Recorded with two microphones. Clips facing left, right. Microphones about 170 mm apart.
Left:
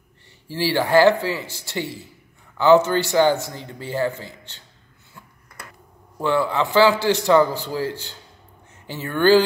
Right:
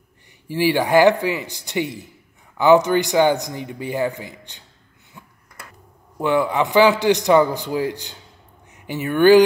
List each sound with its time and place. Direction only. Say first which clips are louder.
0.5 s a man's voice: right 2 dB; 15° right (ahead or behind)
6.1 s a man's voice: right 2 dB; 15° right (ahead or behind)